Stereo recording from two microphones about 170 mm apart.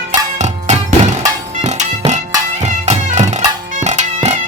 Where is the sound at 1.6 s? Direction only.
45° right (ahead or behind).